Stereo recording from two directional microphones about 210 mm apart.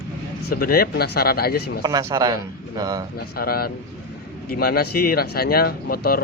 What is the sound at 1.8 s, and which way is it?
Speech, 15° right (ahead or behind).